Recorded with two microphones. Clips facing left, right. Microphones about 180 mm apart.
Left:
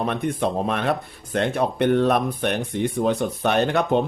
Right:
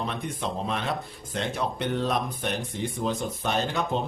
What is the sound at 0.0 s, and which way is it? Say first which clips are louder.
Speech: left 8 dB; 60° left (ahead or behind).